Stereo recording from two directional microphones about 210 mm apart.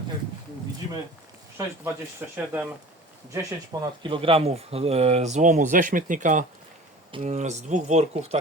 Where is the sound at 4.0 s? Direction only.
25° right (ahead or behind).